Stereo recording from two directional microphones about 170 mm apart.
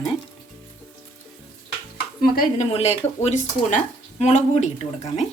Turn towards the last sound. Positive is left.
turn(degrees=40)  # may be behind; listen again after turning